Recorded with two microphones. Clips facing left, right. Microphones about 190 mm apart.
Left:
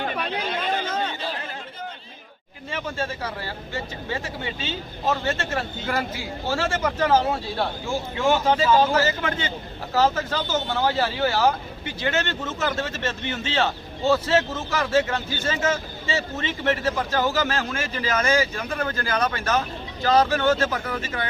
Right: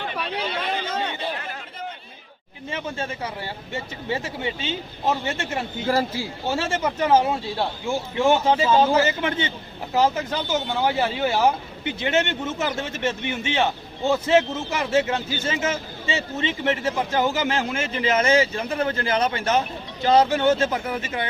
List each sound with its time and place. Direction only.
2.6 s speech: 20° right (ahead or behind)
5.9 s speech: 30° right (ahead or behind)